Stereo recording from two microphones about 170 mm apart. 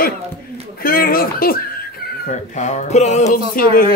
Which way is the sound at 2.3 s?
45° left (ahead or behind).